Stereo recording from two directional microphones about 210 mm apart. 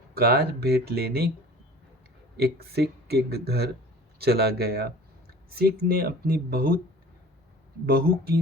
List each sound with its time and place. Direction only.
0.1 s speech: 50° right (ahead or behind)
2.4 s speech: 50° right (ahead or behind)
7.9 s speech: 45° right (ahead or behind)